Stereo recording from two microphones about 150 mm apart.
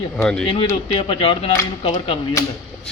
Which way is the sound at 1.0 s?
35° left (ahead or behind).